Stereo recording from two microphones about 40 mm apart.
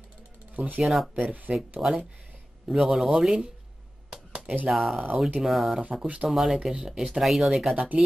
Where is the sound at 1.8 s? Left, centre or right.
Centre.